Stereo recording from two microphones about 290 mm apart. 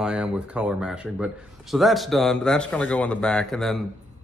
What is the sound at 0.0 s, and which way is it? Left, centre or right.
Speech, centre.